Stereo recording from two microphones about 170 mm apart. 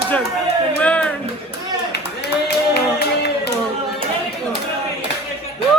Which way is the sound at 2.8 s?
80° left.